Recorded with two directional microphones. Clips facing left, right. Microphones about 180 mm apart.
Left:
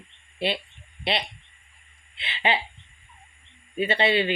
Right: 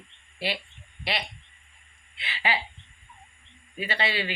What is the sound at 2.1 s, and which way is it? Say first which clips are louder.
Speech: left 4 dB; 25° left (ahead or behind).